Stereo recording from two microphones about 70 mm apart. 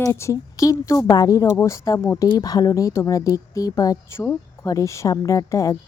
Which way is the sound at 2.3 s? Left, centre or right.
Left.